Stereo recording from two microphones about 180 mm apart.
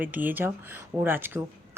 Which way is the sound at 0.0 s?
10° right (ahead or behind).